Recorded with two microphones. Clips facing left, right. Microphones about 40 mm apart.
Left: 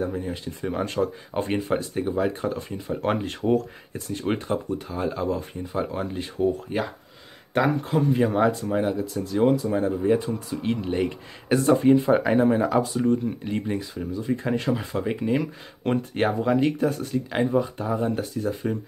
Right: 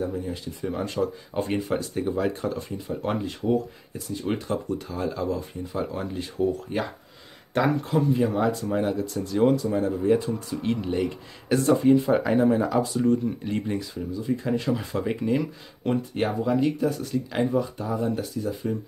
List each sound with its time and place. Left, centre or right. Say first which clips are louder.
0.0 s speech: left 1 dB; left
1.5 s speech: left 2 dB; left
2.9 s speech: left 3 dB; left
3.3 s speech: left 1 dB; left
4.3 s speech: left 2 dB; left
8.1 s speech: left 4 dB; left
8.6 s speech: left 1 dB; centre
9.7 s speech: even; centre
13.0 s speech: even; centre
14.3 s speech: even; left
14.7 s speech: left 1 dB; left
15.8 s speech: left 2 dB; left
17.1 s speech: left 1 dB; left